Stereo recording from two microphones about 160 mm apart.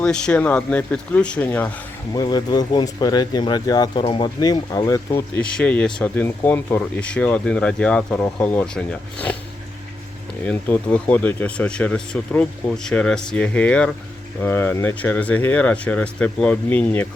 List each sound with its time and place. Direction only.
0.0 s speech: 5° left (ahead or behind)
2.1 s speech: 25° left (ahead or behind); by 9.3 s 10° left (ahead or behind)
10.4 s speech: 10° left (ahead or behind)